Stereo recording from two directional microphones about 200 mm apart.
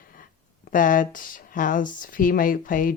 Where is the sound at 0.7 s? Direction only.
40° left (ahead or behind).